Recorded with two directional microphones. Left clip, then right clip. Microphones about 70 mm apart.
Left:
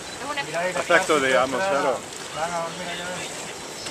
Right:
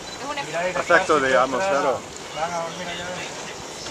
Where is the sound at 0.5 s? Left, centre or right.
Right.